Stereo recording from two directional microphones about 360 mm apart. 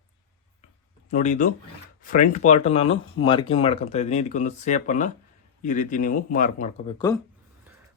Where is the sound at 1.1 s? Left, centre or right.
Centre.